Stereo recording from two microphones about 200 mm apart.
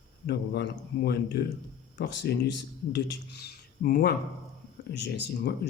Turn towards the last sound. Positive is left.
turn(degrees=55)  # may be behind; listen again after turning